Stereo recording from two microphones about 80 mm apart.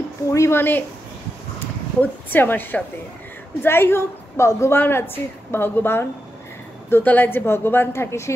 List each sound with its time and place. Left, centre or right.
0.3 s speech: left
0.6 s a woman's voice: left
2.0 s a woman's voice: left
4.7 s a woman's voice: left